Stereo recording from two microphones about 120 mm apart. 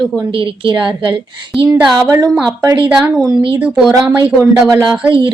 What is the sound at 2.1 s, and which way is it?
Speech, 5° right (ahead or behind).